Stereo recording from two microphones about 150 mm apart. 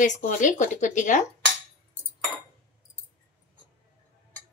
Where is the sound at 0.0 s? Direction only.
55° left (ahead or behind).